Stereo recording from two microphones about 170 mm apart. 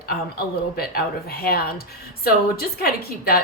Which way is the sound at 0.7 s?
65° left (ahead or behind).